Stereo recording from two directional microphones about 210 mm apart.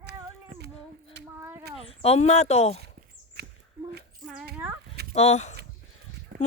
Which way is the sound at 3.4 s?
50° right (ahead or behind).